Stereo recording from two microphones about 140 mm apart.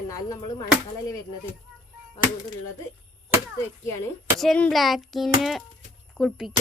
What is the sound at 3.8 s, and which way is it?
Speech, 20° left (ahead or behind).